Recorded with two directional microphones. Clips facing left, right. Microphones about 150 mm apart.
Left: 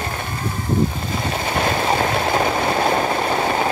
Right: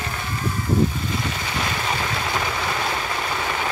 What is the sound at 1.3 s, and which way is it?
Vehicle, 55° left (ahead or behind).